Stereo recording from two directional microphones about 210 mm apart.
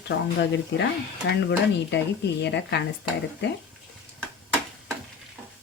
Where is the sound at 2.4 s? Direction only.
55° left (ahead or behind).